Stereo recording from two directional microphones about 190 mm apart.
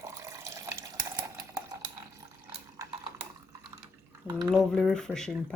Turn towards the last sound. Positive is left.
turn(degrees=5)  # may be behind; listen again after turning